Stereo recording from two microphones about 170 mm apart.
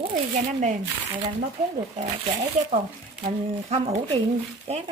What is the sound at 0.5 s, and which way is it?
Speech, 45° right (ahead or behind).